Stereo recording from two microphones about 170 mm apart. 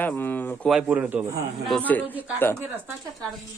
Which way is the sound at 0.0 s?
10° left (ahead or behind).